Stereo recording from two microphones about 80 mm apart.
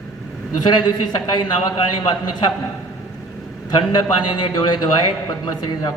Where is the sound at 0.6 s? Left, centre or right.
Left.